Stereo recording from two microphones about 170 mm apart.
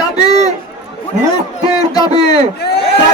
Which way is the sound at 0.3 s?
20° left (ahead or behind).